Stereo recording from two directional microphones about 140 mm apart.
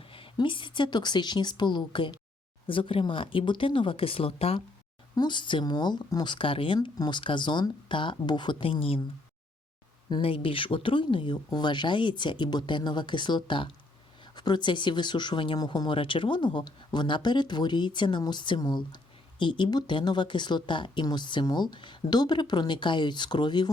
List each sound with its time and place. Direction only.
0.1 s speech: 40° left (ahead or behind)
5.1 s speech: 30° left (ahead or behind)
10.1 s speech: 40° left (ahead or behind)